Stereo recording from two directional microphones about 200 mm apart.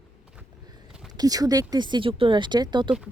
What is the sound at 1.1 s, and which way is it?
Speech, 20° right (ahead or behind).